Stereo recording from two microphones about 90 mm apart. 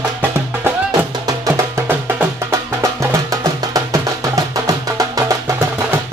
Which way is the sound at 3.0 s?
40° right (ahead or behind).